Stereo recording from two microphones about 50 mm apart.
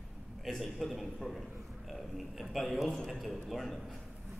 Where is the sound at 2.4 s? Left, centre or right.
Centre.